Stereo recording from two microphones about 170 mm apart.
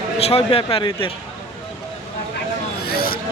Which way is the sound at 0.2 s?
35° left (ahead or behind).